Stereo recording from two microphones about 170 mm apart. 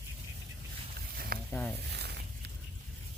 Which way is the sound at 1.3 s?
65° right (ahead or behind).